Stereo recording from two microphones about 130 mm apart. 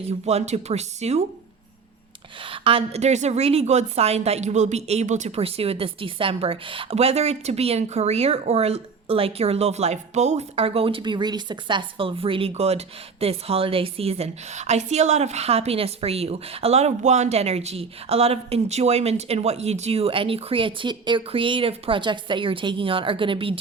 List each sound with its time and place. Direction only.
0.0 s a woman's voice: 55° right (ahead or behind)
2.4 s a woman's voice: 45° right (ahead or behind); by 5.4 s 65° right (ahead or behind)
5.4 s a woman's voice: 50° right (ahead or behind)